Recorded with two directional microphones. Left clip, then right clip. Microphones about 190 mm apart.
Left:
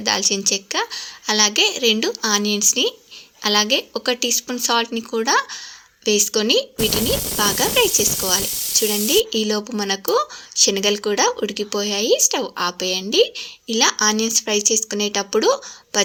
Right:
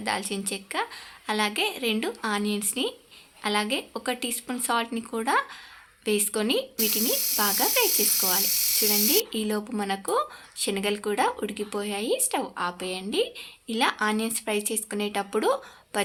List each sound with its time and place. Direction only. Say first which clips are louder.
0.0 s speech: left 10 dB; 25° left (ahead or behind)